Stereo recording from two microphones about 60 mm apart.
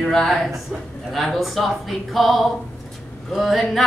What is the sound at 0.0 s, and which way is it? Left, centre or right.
Speech, centre.